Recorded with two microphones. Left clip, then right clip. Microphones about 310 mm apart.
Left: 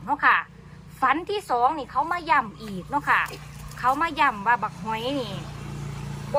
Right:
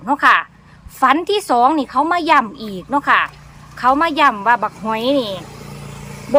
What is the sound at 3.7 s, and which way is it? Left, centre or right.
Speech, right.